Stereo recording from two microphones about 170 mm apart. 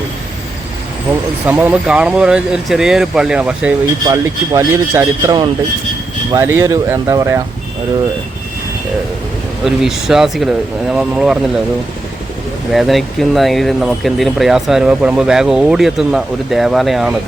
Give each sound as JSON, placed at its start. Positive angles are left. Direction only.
{"t": 1.5, "sound": "speech", "side_deg": -10}
{"t": 4.0, "sound": "speech", "side_deg": -20}
{"t": 9.6, "sound": "speech", "side_deg": 0}
{"t": 12.7, "sound": "speech", "side_deg": 0}